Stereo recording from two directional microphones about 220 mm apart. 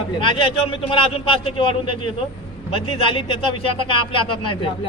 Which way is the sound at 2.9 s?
25° left (ahead or behind).